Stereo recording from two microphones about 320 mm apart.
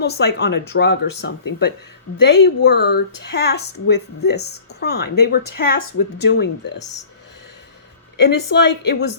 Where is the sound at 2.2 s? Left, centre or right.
Left.